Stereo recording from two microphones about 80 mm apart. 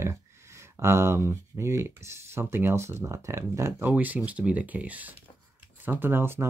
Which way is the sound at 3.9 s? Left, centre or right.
Right.